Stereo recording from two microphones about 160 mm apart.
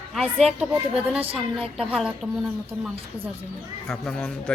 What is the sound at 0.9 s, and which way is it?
Speech, 35° right (ahead or behind).